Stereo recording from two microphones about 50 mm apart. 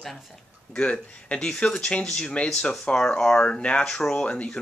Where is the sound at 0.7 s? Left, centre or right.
Left.